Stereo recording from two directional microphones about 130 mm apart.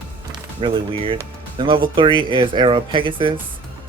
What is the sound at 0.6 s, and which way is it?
Speech, 40° right (ahead or behind).